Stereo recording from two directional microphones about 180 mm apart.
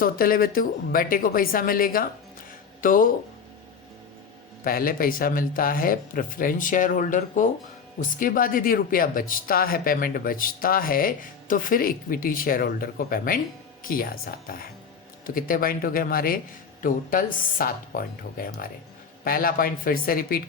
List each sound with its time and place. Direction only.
0.0 s speech: 50° left (ahead or behind)
4.6 s speech: 55° left (ahead or behind)